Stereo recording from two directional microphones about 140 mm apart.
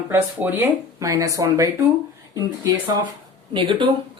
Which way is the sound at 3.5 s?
35° right (ahead or behind).